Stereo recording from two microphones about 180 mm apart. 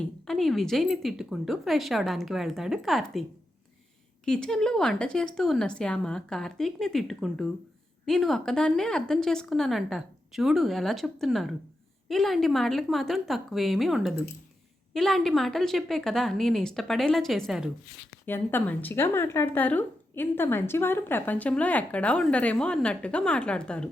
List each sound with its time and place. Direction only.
0.3 s speech: centre (ahead or behind)
4.3 s speech: 5° left (ahead or behind)
18.3 s a woman's voice: 10° left (ahead or behind)